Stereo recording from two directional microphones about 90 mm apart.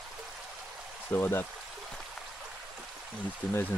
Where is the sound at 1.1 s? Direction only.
25° left (ahead or behind).